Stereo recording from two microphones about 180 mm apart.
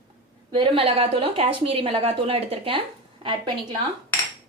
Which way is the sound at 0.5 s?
30° right (ahead or behind).